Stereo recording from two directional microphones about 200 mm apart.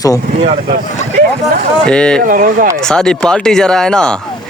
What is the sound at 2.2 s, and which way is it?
Speech, 45° right (ahead or behind).